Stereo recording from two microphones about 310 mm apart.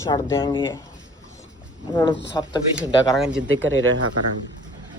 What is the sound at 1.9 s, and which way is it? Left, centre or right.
Speech, centre.